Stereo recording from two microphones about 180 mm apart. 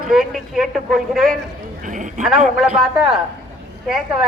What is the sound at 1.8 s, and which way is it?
Speech, 45° right (ahead or behind).